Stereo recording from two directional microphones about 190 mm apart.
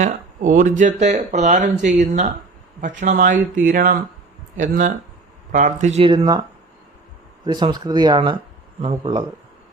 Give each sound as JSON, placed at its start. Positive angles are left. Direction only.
{"t": 0.0, "sound": "speech", "side_deg": -45}
{"t": 7.4, "sound": "speech", "side_deg": -25}